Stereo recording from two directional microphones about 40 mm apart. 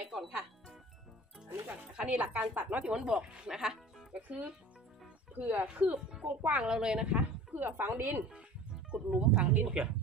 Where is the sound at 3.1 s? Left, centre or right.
Centre.